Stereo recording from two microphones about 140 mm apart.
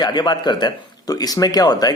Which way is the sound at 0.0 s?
30° left (ahead or behind).